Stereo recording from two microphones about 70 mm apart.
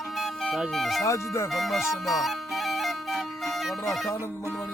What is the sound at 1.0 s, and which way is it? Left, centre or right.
Speech, left.